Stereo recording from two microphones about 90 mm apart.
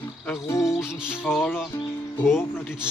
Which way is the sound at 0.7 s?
10° right (ahead or behind).